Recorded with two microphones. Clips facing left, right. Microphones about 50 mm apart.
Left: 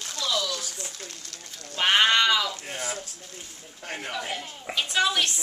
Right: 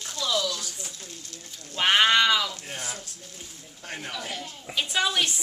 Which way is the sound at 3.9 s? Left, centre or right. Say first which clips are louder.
Left 2 dB; centre.